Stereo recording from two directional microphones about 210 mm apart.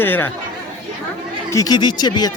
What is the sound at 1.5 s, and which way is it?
Speech, 15° left (ahead or behind).